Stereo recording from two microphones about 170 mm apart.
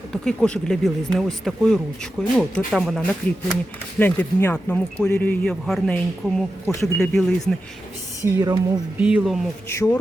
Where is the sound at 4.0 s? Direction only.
10° left (ahead or behind).